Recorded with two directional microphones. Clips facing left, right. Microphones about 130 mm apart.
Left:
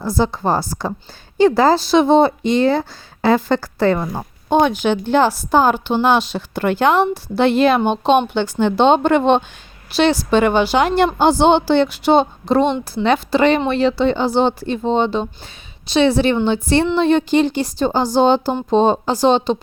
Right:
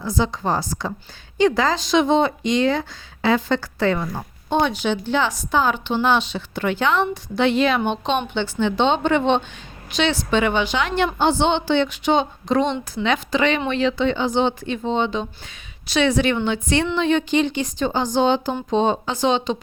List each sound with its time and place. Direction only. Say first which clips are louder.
0.2 s a woman's voice: left 4 dB; 40° left (ahead or behind)
4.4 s a woman's voice: left 5 dB; 50° left (ahead or behind)